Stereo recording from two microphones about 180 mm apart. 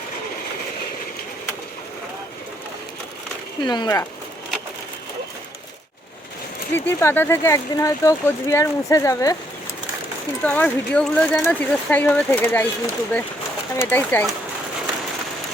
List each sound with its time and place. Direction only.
3.6 s speech: 25° left (ahead or behind)
6.7 s speech: 10° left (ahead or behind)
10.4 s speech: 10° left (ahead or behind)
13.7 s speech: 10° left (ahead or behind)